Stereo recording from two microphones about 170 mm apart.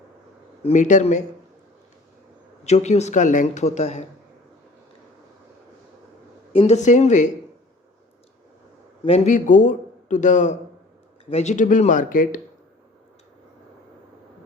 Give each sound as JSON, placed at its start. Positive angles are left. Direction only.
{"t": 0.6, "sound": "speech", "side_deg": 45}
{"t": 2.6, "sound": "speech", "side_deg": 40}
{"t": 6.5, "sound": "speech", "side_deg": 35}
{"t": 9.0, "sound": "speech", "side_deg": 40}